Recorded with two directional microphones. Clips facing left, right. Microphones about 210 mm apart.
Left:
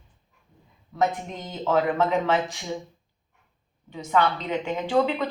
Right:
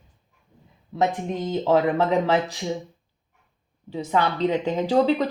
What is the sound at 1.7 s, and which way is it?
Speech, 35° right (ahead or behind).